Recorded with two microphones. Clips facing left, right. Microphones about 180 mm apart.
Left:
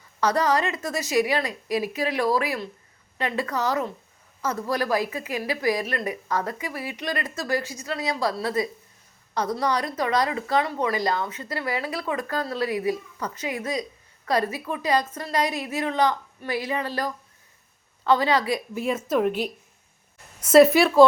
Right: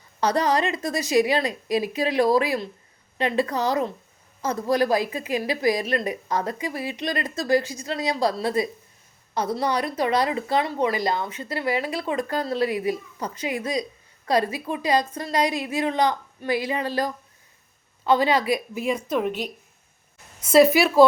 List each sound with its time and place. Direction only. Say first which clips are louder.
0.2 s a woman's voice: right 1 dB; 30° right (ahead or behind)
2.2 s a woman's voice: right 4 dB; 20° right (ahead or behind)
9.4 s a woman's voice: right 1 dB; 10° right (ahead or behind)
10.0 s a woman's voice: right 3 dB; 30° right (ahead or behind)
14.3 s a woman's voice: right 2 dB; 15° right (ahead or behind)
19.0 s a woman's voice: left 2 dB; 5° left (ahead or behind)
20.4 s a woman's voice: left 1 dB; 10° right (ahead or behind)